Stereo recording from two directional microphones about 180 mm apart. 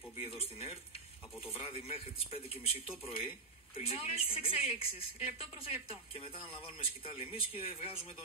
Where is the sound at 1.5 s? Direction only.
30° left (ahead or behind).